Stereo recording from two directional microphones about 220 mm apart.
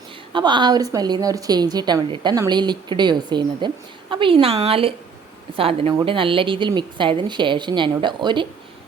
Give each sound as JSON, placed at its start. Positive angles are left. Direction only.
{"t": 0.3, "sound": "a woman's voice", "side_deg": -20}